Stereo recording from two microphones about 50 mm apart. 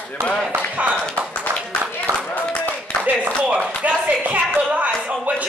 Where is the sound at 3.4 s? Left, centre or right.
Right.